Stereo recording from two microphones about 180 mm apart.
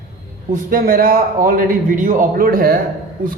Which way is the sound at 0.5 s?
50° right (ahead or behind).